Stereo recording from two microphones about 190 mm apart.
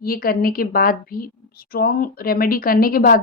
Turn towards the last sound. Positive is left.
turn(degrees=50)  # may be behind; listen again after turning